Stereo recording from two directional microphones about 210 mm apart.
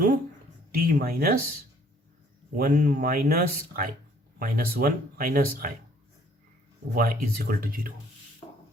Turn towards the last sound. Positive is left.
turn(degrees=-45)  # may be behind; listen again after turning